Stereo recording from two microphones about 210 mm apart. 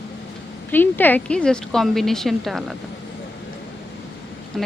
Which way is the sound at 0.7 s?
10° left (ahead or behind).